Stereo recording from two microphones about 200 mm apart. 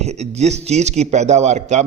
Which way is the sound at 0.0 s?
35° right (ahead or behind).